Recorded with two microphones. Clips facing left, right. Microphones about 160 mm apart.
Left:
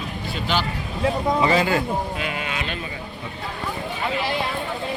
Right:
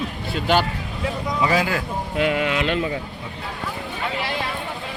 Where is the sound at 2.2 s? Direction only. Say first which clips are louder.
Right 7 dB; 70° right (ahead or behind); by 2.9 s 85° right.